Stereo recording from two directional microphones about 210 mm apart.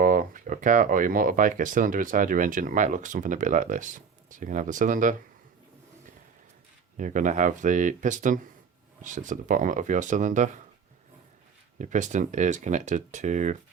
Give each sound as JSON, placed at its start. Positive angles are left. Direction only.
{"t": 0.0, "sound": "speech", "side_deg": -40}
{"t": 6.9, "sound": "speech", "side_deg": -40}
{"t": 11.8, "sound": "speech", "side_deg": -35}